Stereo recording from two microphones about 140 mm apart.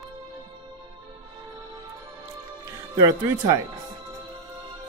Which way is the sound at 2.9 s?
25° right (ahead or behind).